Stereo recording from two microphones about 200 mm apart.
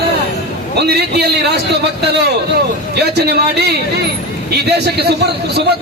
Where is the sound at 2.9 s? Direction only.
55° right (ahead or behind).